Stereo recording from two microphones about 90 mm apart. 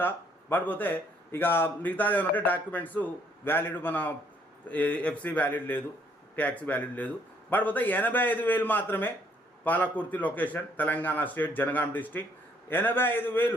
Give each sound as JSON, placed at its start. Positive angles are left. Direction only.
{"t": 0.0, "sound": "a man's voice", "side_deg": 25}